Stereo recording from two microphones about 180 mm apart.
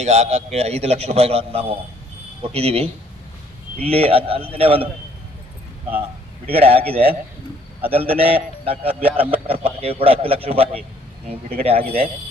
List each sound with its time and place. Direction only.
0.0 s a man's voice: 35° right (ahead or behind)
6.5 s a man's voice: 30° right (ahead or behind)